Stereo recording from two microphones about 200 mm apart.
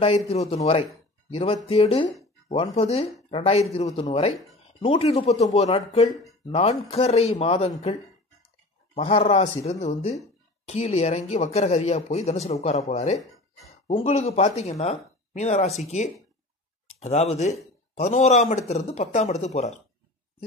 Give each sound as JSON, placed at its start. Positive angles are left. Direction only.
{"t": 0.3, "sound": "a man's voice", "side_deg": 35}
{"t": 17.0, "sound": "speech", "side_deg": 35}